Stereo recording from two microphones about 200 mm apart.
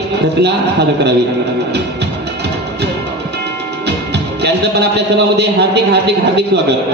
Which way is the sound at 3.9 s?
55° right (ahead or behind).